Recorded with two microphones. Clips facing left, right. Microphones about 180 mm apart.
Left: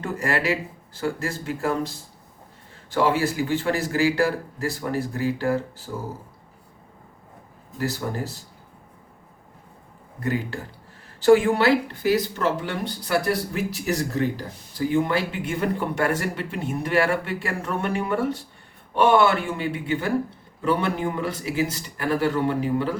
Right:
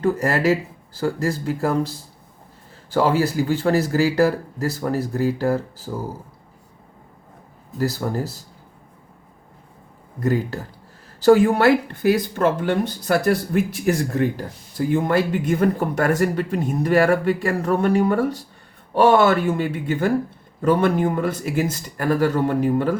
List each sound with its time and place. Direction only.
0.0 s speech: 40° right (ahead or behind)
2.9 s speech: 40° right (ahead or behind)
7.8 s speech: 40° right (ahead or behind)
10.2 s speech: 40° right (ahead or behind)